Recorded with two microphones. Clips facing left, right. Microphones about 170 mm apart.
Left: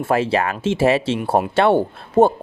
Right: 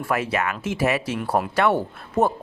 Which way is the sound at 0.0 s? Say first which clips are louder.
Left 6 dB; 30° left (ahead or behind).